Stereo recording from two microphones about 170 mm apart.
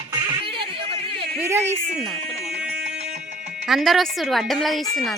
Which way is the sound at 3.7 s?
Centre (ahead or behind).